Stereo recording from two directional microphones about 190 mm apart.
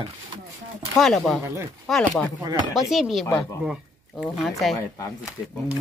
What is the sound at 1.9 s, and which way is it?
Speech, centre (ahead or behind).